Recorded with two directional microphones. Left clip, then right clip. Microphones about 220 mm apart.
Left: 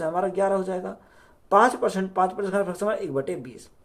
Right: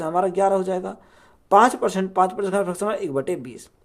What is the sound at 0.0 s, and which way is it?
Speech, 35° right (ahead or behind).